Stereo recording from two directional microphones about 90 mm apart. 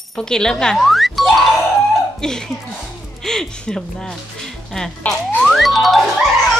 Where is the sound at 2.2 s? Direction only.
5° left (ahead or behind).